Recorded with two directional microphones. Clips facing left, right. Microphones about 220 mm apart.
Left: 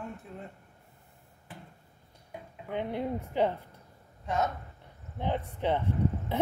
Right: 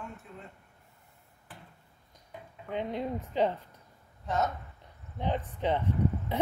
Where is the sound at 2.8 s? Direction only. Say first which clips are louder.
Left 1 dB; 15° right (ahead or behind).